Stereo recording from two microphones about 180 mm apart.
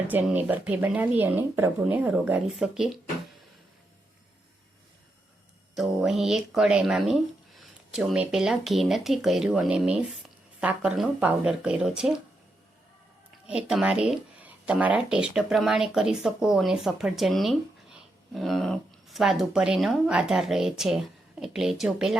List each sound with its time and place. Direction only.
0.1 s speech: 10° right (ahead or behind)
5.7 s speech: centre (ahead or behind)
13.5 s speech: 5° right (ahead or behind)